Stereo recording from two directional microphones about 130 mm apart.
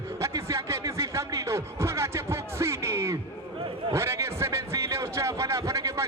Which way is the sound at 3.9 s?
20° right (ahead or behind).